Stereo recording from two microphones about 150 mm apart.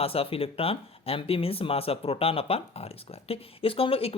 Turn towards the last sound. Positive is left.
turn(degrees=40)  # may be behind; listen again after turning